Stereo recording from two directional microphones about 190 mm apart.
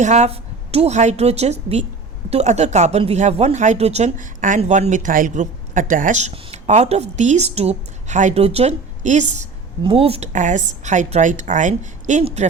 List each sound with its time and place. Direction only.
0.0 s speech: 35° right (ahead or behind)